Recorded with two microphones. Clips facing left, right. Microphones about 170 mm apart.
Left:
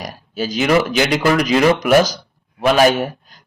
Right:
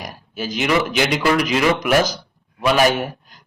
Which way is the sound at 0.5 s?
40° left (ahead or behind).